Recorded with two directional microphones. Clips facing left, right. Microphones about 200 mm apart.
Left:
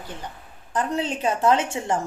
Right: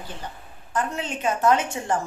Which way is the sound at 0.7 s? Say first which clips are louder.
Left 3 dB; 35° left (ahead or behind).